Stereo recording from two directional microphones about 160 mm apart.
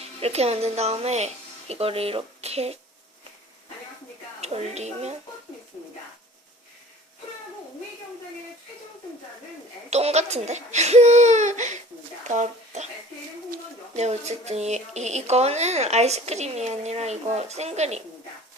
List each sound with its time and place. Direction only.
0.2 s speech: 40° right (ahead or behind)
4.4 s a woman's voice: 45° right (ahead or behind)
9.9 s speech: 40° right (ahead or behind)
13.9 s speech: 45° right (ahead or behind)